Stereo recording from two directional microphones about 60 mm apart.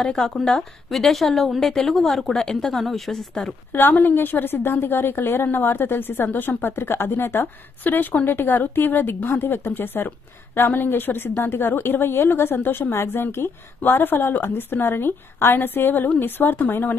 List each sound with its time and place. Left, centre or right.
0.0 s a woman's voice: centre
3.7 s a woman's voice: left